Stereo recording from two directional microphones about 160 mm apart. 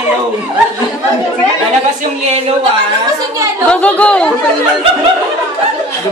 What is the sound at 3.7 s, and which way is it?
Speech, 5° left (ahead or behind).